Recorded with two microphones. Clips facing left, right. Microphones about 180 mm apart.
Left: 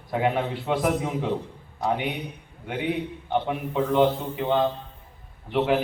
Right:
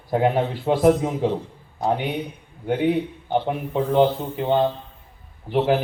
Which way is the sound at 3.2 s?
35° right (ahead or behind).